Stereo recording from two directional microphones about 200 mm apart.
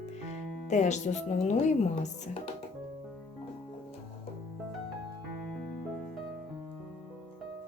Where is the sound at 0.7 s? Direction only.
35° left (ahead or behind).